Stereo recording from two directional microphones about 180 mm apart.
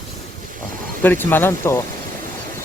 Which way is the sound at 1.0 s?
10° left (ahead or behind).